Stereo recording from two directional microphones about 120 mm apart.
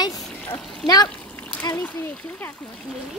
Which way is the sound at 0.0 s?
35° left (ahead or behind).